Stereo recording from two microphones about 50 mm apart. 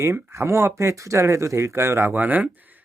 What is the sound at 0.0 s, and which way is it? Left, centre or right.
Speech, right.